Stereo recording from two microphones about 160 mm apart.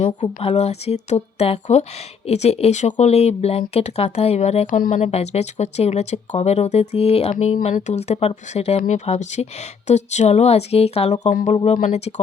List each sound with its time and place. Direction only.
0.3 s speech: 40° left (ahead or behind); by 5.0 s 55° left (ahead or behind)
5.0 s speech: 40° left (ahead or behind)
11.5 s speech: 35° left (ahead or behind)